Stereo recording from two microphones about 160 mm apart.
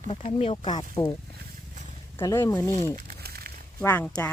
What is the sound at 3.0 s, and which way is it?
Crumpling, 75° right (ahead or behind).